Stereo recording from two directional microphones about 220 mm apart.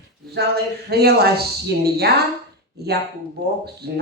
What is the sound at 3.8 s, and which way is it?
Speech, 45° right (ahead or behind).